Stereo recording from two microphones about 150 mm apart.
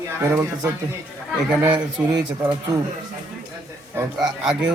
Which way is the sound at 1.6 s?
30° right (ahead or behind).